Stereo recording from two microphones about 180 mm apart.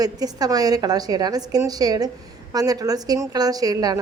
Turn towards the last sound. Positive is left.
turn(degrees=-20)  # may be behind; listen again after turning